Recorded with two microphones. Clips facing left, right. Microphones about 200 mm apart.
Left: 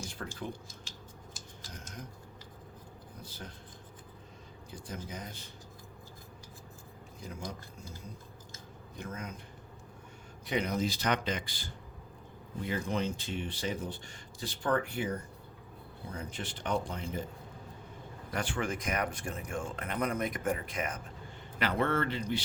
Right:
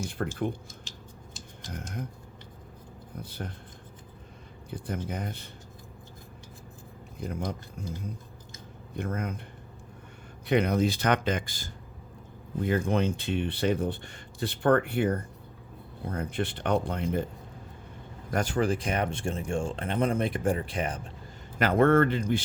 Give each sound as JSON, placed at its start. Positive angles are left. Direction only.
{"t": 0.0, "sound": "speech", "side_deg": -55}
{"t": 1.7, "sound": "speech", "side_deg": -55}
{"t": 3.2, "sound": "speech", "side_deg": -60}
{"t": 4.7, "sound": "speech", "side_deg": -60}
{"t": 7.2, "sound": "speech", "side_deg": -60}
{"t": 9.0, "sound": "speech", "side_deg": -60}
{"t": 10.4, "sound": "speech", "side_deg": -60}
{"t": 18.3, "sound": "speech", "side_deg": -40}
{"t": 21.6, "sound": "speech", "side_deg": -50}